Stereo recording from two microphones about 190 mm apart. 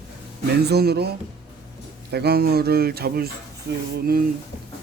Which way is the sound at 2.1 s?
55° right (ahead or behind).